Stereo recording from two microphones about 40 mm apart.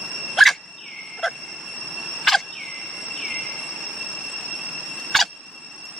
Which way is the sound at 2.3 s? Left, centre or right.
Centre.